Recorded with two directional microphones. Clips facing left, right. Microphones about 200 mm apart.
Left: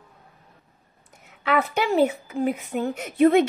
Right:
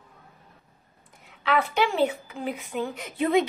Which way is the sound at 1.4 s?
45° left (ahead or behind).